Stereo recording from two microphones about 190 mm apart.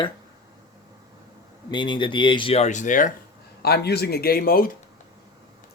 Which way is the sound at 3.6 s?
55° left (ahead or behind).